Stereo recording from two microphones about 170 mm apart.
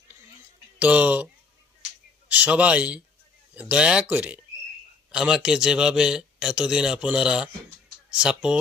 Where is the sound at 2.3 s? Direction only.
10° right (ahead or behind).